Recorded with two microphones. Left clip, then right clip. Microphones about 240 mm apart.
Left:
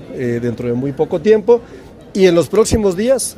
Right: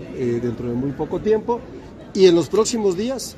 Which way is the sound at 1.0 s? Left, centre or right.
Left.